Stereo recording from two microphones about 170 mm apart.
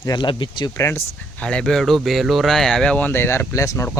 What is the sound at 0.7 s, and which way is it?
Speech, 15° left (ahead or behind).